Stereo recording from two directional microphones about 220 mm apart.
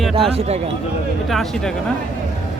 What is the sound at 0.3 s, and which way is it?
Speech, 30° right (ahead or behind).